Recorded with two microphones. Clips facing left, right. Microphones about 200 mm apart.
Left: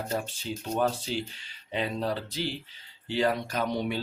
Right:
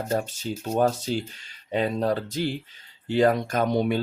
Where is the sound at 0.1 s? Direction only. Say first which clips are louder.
Right 5 dB; 45° right (ahead or behind).